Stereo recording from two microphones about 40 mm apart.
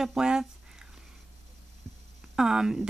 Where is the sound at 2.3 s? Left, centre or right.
Centre.